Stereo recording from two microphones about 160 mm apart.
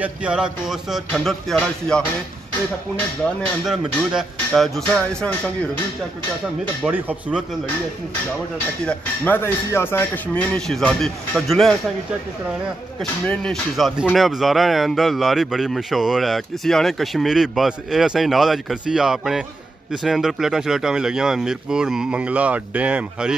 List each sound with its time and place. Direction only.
0.0 s speech: 5° right (ahead or behind)
3.6 s speech: 5° right (ahead or behind)
6.9 s speech: 10° right (ahead or behind)
8.8 s speech: 10° left (ahead or behind)
13.0 s speech: 5° left (ahead or behind)